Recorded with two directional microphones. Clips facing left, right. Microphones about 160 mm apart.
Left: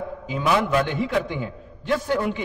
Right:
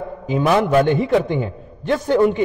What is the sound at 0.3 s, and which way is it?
A man's voice, 50° right (ahead or behind).